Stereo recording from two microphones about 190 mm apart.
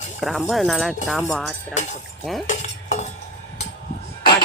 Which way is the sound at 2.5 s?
40° left (ahead or behind).